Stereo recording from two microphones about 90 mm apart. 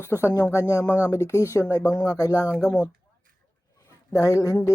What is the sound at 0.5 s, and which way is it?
Speech, 20° right (ahead or behind).